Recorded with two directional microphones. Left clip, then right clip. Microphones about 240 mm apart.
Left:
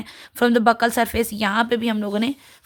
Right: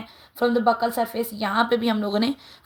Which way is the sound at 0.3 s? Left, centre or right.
Left.